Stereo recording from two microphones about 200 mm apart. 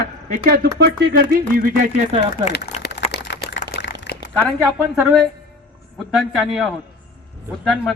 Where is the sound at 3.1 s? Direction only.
55° left (ahead or behind).